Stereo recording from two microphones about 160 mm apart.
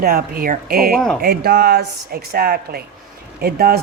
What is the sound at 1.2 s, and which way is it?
Speech, 85° right.